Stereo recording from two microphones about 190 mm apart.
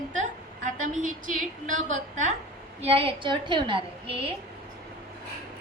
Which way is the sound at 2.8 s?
30° right (ahead or behind).